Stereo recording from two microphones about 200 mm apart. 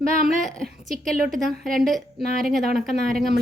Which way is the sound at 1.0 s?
Centre (ahead or behind).